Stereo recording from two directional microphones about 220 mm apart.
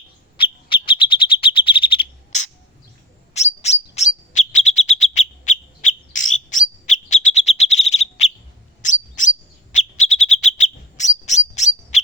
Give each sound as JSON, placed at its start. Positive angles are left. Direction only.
{"t": 0.3, "sound": "bird", "side_deg": 25}
{"t": 9.7, "sound": "chirp", "side_deg": 35}